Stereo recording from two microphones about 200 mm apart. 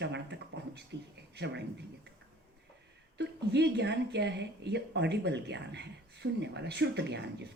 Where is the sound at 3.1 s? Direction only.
60° right (ahead or behind).